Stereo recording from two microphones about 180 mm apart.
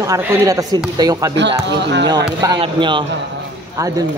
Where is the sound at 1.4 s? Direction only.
75° right (ahead or behind).